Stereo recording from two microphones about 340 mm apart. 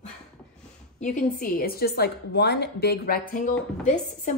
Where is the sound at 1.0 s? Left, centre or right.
Left.